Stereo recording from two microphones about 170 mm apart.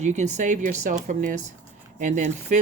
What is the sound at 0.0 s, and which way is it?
Speech, 45° right (ahead or behind).